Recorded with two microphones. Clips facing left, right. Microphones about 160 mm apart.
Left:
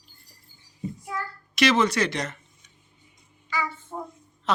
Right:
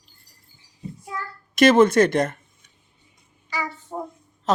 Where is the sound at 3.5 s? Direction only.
40° right (ahead or behind).